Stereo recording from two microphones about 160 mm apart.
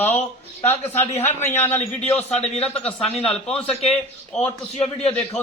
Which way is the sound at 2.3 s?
40° left (ahead or behind).